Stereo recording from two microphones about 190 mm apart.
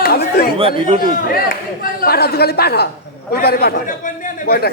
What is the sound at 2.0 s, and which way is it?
A man's voice, 55° left (ahead or behind).